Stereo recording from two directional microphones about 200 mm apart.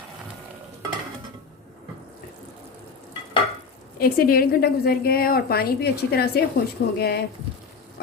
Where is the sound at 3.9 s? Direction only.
50° left (ahead or behind).